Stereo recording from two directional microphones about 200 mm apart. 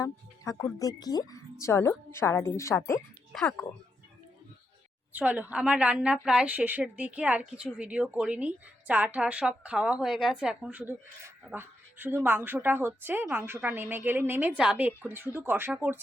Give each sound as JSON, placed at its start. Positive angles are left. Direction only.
{"t": 0.0, "sound": "speech", "side_deg": 15}
{"t": 3.3, "sound": "speech", "side_deg": 5}
{"t": 5.1, "sound": "a woman's voice", "side_deg": -5}